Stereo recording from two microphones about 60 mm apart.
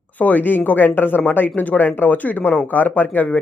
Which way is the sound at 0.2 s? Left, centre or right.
Left.